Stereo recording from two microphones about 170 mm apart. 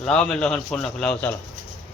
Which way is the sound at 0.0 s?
5° left (ahead or behind).